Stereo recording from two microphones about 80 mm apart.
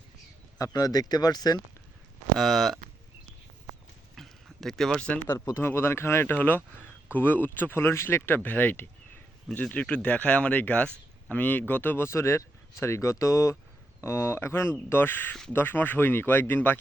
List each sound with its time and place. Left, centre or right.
0.6 s speech: left
2.4 s speech: centre
4.1 s a sound: centre
5.5 s speech: left